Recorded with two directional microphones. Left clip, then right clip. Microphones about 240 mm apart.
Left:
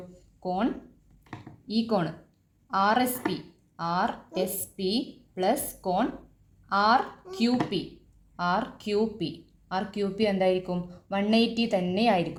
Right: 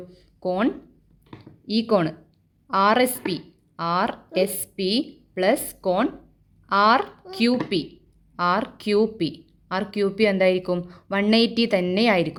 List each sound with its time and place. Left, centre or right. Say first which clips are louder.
0.3 s a woman's voice: right 5 dB; right